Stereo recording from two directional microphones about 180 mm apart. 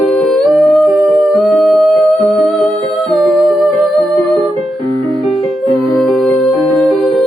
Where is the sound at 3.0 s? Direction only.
Centre (ahead or behind).